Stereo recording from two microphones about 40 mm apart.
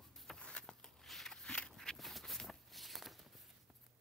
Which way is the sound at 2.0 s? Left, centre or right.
Centre.